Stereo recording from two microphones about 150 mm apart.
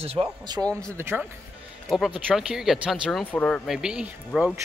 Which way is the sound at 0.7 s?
20° right (ahead or behind).